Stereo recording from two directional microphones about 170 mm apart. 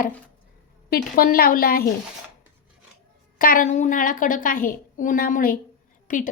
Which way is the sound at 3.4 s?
55° left (ahead or behind).